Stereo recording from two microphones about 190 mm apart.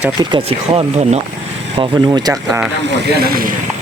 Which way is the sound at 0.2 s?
25° right (ahead or behind).